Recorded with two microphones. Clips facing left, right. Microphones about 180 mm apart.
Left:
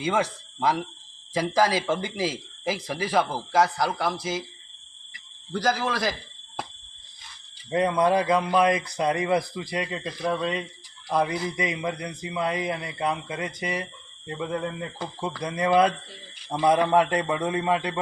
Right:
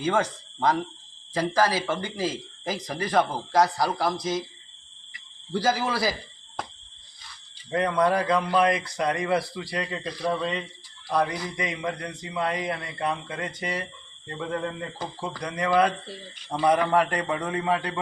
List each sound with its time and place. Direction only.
0.0 s speech: 10° left (ahead or behind)
5.5 s speech: 10° right (ahead or behind)
7.7 s a man's voice: 15° left (ahead or behind)